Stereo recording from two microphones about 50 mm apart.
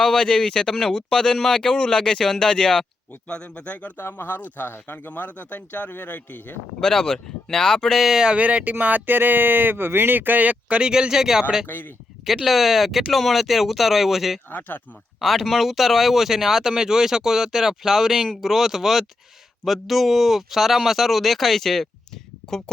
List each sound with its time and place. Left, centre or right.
0.0 s a man's voice: centre; by 3.9 s left
3.9 s speech: left
4.4 s speech: left
6.7 s a man's voice: centre
7.9 s speech: centre
8.4 s speech: right
10.8 s speech: centre
11.6 s speech: left
12.5 s speech: centre
14.7 s speech: left
15.2 s speech: centre